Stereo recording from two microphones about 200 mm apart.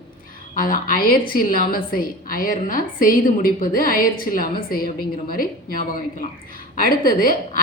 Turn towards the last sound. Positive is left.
turn(degrees=45)  # may be behind; listen again after turning